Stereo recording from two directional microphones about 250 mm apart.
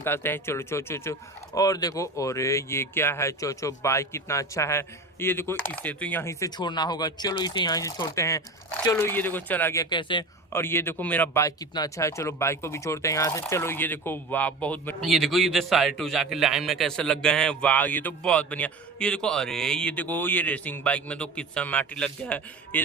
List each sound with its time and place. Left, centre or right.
0.0 s speech: centre